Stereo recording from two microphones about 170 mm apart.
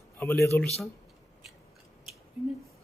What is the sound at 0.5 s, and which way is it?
Speech, centre (ahead or behind).